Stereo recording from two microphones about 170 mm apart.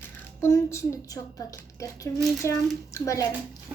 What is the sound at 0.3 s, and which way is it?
A woman's voice, 15° left (ahead or behind).